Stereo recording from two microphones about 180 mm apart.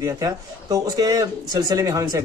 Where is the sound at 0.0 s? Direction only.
20° right (ahead or behind).